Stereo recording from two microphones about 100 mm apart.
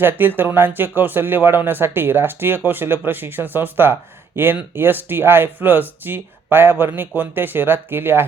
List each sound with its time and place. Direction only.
0.0 s speech: 20° right (ahead or behind)